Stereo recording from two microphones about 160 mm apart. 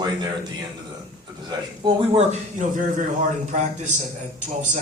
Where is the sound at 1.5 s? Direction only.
30° right (ahead or behind).